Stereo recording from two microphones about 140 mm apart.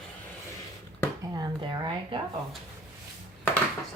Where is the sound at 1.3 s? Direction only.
30° right (ahead or behind).